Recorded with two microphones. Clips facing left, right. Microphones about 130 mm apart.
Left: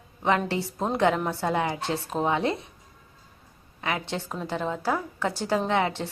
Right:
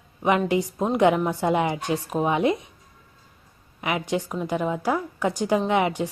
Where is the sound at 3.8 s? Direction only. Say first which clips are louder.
Right 4 dB; 15° right (ahead or behind).